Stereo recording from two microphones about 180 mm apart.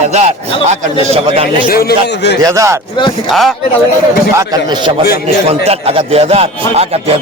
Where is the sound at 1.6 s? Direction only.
55° left (ahead or behind).